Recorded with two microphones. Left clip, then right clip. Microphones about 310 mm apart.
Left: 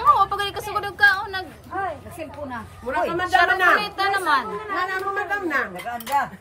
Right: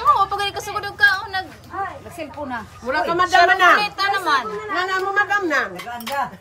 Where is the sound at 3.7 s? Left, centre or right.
Centre.